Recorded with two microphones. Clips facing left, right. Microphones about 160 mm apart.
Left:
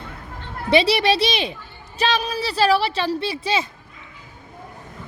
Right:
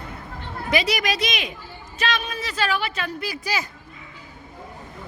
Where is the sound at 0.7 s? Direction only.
30° left (ahead or behind).